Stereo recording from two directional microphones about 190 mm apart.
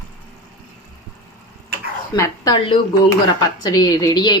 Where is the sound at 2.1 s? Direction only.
20° left (ahead or behind).